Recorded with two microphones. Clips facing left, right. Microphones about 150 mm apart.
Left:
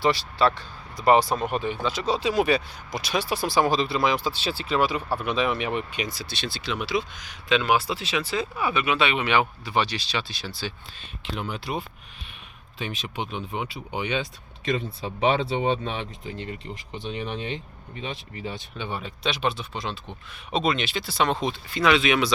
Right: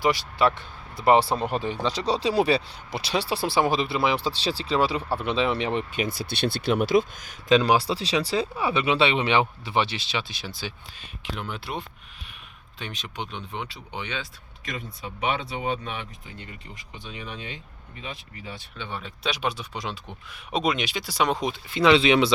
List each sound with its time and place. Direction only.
0.0 s speech: 15° right (ahead or behind)
6.0 s speech: 55° right (ahead or behind); by 11.3 s 10° right (ahead or behind)
11.3 s speech: centre (ahead or behind); by 18.9 s 20° left (ahead or behind)
18.9 s speech: 10° left (ahead or behind)
19.2 s speech: 10° right (ahead or behind); by 22.3 s 25° right (ahead or behind)